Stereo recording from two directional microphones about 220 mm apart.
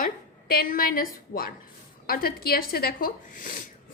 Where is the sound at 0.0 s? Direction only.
40° left (ahead or behind).